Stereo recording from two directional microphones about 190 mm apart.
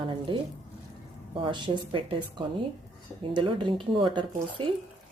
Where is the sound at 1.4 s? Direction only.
25° right (ahead or behind).